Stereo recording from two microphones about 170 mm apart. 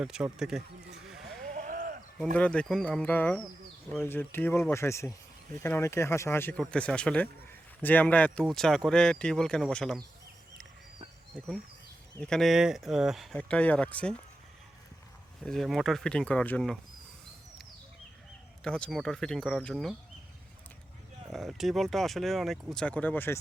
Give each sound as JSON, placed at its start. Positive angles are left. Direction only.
{"t": 0.0, "sound": "speech", "side_deg": -5}
{"t": 0.9, "sound": "sheep", "side_deg": 0}
{"t": 1.5, "sound": "sheep", "side_deg": -50}
{"t": 2.3, "sound": "speech", "side_deg": 5}
{"t": 12.2, "sound": "speech", "side_deg": 0}
{"t": 15.4, "sound": "speech", "side_deg": 0}
{"t": 18.6, "sound": "speech", "side_deg": 5}
{"t": 21.3, "sound": "speech", "side_deg": 0}